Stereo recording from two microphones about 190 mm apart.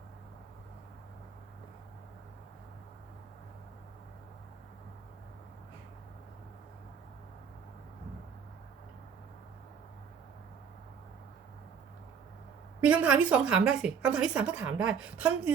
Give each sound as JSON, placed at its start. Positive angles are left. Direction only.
{"t": 12.8, "sound": "a woman's voice", "side_deg": -5}